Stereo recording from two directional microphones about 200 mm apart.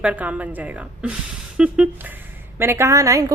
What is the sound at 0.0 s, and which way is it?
A woman's voice, 5° right (ahead or behind).